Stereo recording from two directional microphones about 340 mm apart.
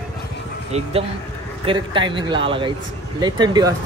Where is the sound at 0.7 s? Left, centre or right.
Centre.